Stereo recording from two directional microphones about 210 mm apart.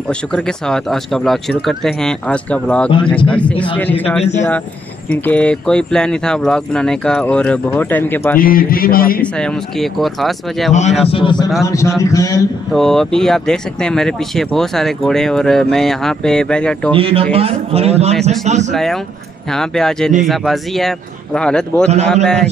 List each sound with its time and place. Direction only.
0.3 s a man's voice: 5° left (ahead or behind)
4.2 s speech: 35° left (ahead or behind)
5.1 s speech: 5° left (ahead or behind)
8.4 s a sound: 45° left (ahead or behind)
9.2 s speech: centre (ahead or behind)
11.1 s a man's voice: 25° left (ahead or behind)
12.7 s speech: centre (ahead or behind)
16.9 s a man's voice: 25° right (ahead or behind)
18.7 s speech: centre (ahead or behind)